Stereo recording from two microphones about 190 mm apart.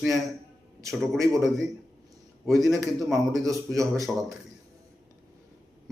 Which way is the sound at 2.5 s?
Centre (ahead or behind).